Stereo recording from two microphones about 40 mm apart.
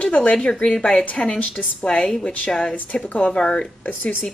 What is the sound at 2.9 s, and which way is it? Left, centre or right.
Speech, left.